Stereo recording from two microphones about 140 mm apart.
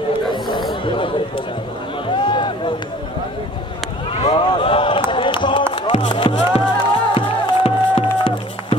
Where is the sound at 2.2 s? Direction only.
35° left (ahead or behind).